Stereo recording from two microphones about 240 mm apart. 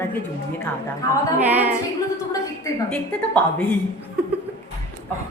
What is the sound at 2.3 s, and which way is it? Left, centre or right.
Speech, centre.